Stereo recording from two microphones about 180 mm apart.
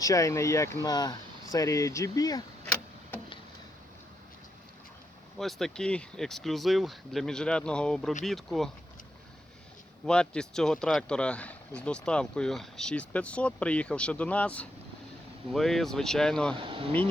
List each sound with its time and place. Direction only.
0.0 s speech: 20° left (ahead or behind)
5.4 s speech: centre (ahead or behind)
10.1 s speech: 5° left (ahead or behind)
16.6 s speech: 30° right (ahead or behind)